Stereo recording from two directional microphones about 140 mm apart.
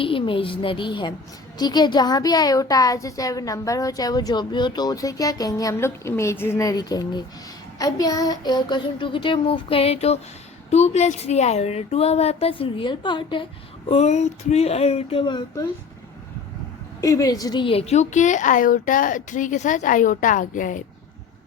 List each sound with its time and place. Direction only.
0.0 s child singing: 40° left (ahead or behind)
1.5 s a woman's voice: 30° left (ahead or behind)
7.8 s child singing: 25° left (ahead or behind); by 10.2 s 50° left (ahead or behind)
10.7 s speech: 55° left (ahead or behind); by 13.4 s 35° left (ahead or behind)
13.8 s speech: 50° left (ahead or behind); by 15.6 s 35° left (ahead or behind)
17.0 s a woman's voice: 25° left (ahead or behind); by 20.8 s 70° left (ahead or behind)